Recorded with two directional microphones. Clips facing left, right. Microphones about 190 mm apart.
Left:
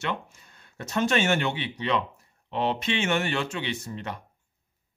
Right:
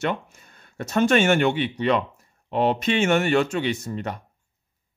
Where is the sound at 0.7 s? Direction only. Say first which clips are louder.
Right 6 dB; 50° right (ahead or behind).